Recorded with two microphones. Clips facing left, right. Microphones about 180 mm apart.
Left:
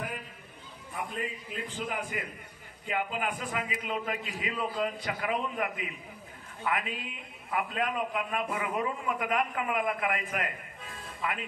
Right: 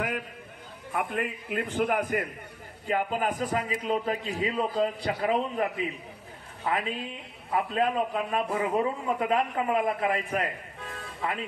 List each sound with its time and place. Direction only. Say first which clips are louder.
0.9 s a man's voice: right 6 dB; 60° right (ahead or behind)
2.9 s a man's voice: right 5 dB; 40° right (ahead or behind)